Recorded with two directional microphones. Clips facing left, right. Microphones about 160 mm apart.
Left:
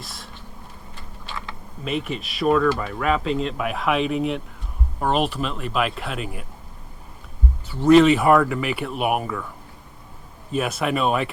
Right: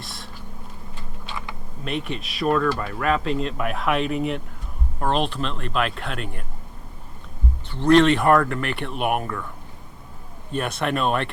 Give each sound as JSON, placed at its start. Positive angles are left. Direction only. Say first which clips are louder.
{"t": 0.0, "sound": "a sound", "louder": "right 1 dB", "side_deg": 0}
{"t": 1.8, "sound": "speech", "louder": "left 2 dB", "side_deg": 0}
{"t": 7.7, "sound": "speech", "louder": "left 2 dB", "side_deg": 5}
{"t": 10.5, "sound": "speech", "louder": "left 2 dB", "side_deg": 5}